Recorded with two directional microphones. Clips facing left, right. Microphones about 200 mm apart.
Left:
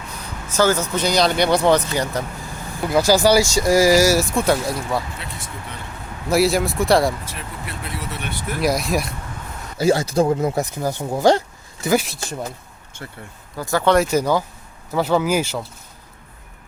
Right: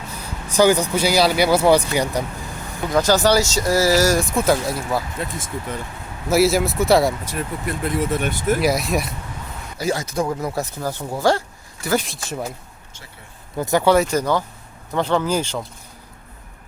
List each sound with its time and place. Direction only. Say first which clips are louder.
0.4 s speech: right 3 dB; 15° right (ahead or behind)
2.8 s speech: left 1 dB; 10° left (ahead or behind)
6.2 s speech: right 1 dB; centre (ahead or behind)
7.3 s speech: right 7 dB; 45° right (ahead or behind)
8.6 s speech: even; centre (ahead or behind)
9.7 s speech: left 6 dB; 30° left (ahead or behind)
11.9 s speech: right 2 dB; centre (ahead or behind)
13.6 s speech: right 3 dB; 20° right (ahead or behind)
13.8 s speech: even; 5° right (ahead or behind)
14.1 s speech: left 1 dB; 10° left (ahead or behind)